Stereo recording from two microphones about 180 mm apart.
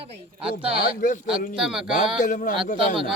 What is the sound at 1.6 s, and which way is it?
Speech, 5° right (ahead or behind).